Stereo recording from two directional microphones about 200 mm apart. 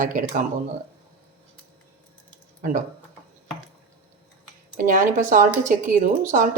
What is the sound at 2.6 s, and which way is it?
Speech, 40° right (ahead or behind).